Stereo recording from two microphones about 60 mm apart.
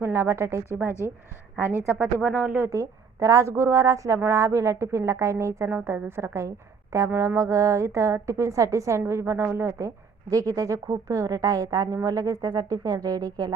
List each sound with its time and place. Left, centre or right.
0.0 s a woman's voice: right
2.2 s speech: right
2.6 s a woman's voice: right
5.6 s a woman's voice: right
9.0 s a woman's voice: right